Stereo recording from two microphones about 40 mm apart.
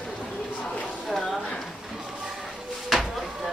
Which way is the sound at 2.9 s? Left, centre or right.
Centre.